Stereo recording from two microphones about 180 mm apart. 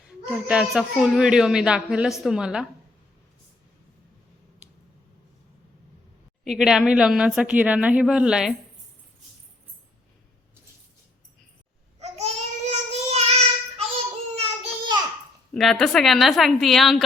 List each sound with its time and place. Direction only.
0.3 s speech: 5° right (ahead or behind)
6.4 s speech: centre (ahead or behind)
11.9 s child singing: 35° right (ahead or behind)
14.3 s a sound: 35° right (ahead or behind)
15.5 s speech: 5° left (ahead or behind)